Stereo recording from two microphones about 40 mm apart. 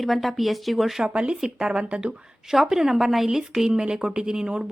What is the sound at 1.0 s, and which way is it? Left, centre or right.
Speech, right.